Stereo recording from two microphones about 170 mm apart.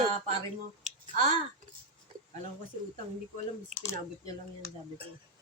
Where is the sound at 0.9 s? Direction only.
45° right (ahead or behind).